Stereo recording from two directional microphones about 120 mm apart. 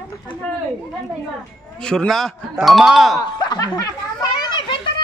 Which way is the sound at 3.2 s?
30° left (ahead or behind).